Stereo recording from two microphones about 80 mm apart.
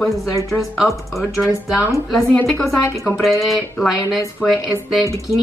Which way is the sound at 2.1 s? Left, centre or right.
Centre.